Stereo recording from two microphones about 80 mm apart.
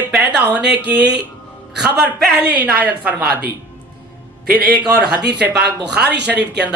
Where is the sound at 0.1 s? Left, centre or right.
Centre.